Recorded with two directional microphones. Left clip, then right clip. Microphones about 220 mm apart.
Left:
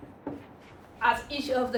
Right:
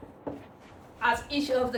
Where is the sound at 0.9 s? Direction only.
5° left (ahead or behind).